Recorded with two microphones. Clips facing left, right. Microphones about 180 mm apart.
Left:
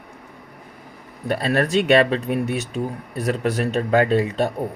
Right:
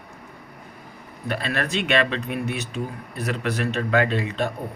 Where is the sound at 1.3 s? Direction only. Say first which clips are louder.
Left 6 dB; 40° left (ahead or behind).